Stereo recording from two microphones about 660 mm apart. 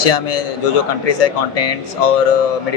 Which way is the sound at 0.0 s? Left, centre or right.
Left.